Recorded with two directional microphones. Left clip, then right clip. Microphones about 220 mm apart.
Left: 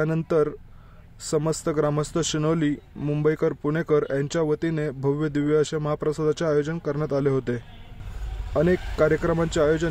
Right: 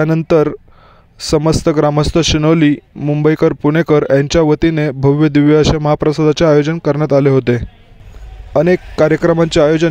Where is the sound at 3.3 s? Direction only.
35° right (ahead or behind).